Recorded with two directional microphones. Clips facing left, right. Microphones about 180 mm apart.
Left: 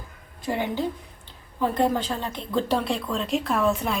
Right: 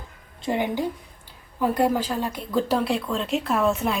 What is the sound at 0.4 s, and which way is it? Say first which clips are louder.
A woman's voice: right 2 dB; 15° right (ahead or behind).